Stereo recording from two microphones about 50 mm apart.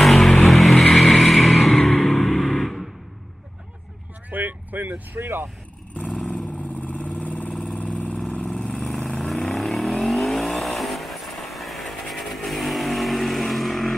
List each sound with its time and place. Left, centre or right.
0.0 s vehicle: centre
4.3 s vehicle: right
6.3 s vehicle: left
8.5 s vehicle: centre